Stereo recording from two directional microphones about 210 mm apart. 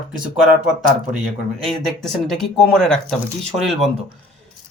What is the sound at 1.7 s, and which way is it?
Speech, centre (ahead or behind).